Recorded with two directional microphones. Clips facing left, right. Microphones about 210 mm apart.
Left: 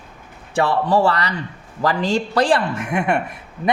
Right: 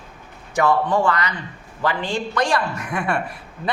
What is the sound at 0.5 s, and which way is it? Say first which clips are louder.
A man's voice: left 1 dB; 35° left (ahead or behind).